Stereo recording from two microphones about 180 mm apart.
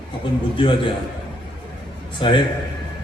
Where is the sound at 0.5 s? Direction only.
25° left (ahead or behind).